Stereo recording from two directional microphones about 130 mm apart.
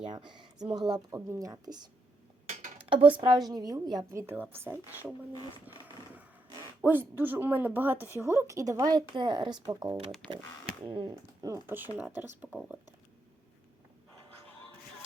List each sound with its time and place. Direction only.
0.3 s speech: 35° right (ahead or behind)
2.5 s a sound: 80° right
2.7 s dishes: 45° right (ahead or behind)
3.2 s a woman's voice: 30° right (ahead or behind)
4.1 s speech: 20° right (ahead or behind)
6.8 s a woman's voice: 15° right (ahead or behind); by 11.1 s 40° right (ahead or behind)
11.3 s speech: 25° right (ahead or behind)